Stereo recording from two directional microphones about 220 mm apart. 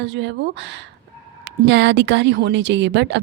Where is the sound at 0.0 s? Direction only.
55° right (ahead or behind).